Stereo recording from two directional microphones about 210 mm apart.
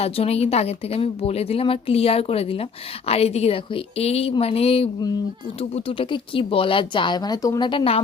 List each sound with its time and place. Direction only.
0.0 s speech: 30° left (ahead or behind)